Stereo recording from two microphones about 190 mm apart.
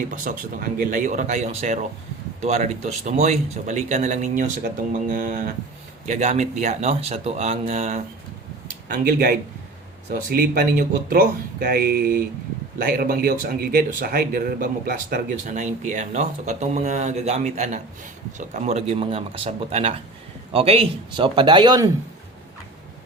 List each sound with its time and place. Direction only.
0.3 s speech: 45° right (ahead or behind)
8.6 s a sound: 45° right (ahead or behind)
10.1 s a man's voice: 50° right (ahead or behind); by 21.8 s 25° right (ahead or behind)